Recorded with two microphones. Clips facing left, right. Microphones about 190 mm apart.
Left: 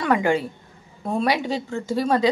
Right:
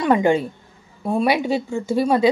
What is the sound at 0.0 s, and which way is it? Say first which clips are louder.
A woman's voice: right 4 dB; 20° right (ahead or behind).